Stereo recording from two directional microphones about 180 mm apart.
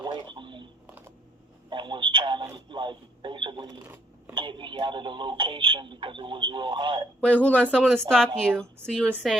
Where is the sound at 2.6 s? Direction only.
25° right (ahead or behind).